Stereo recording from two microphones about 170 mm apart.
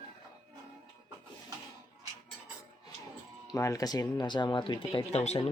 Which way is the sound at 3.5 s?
20° left (ahead or behind).